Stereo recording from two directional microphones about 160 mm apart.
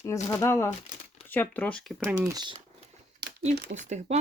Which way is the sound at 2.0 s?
20° right (ahead or behind).